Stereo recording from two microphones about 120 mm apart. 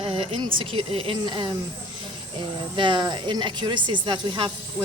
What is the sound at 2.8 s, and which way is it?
Speech, 40° right (ahead or behind).